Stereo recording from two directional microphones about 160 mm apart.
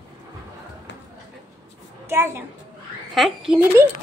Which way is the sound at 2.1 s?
15° right (ahead or behind).